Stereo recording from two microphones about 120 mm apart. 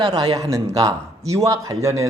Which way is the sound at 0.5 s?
25° right (ahead or behind).